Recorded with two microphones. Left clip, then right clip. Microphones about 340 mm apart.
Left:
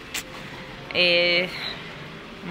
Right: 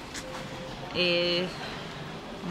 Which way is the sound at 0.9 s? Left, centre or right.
Centre.